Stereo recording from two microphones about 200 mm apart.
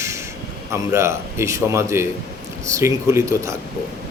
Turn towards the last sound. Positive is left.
turn(degrees=-15)  # may be behind; listen again after turning